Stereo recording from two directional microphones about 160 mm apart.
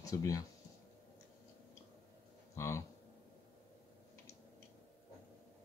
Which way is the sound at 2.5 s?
15° left (ahead or behind).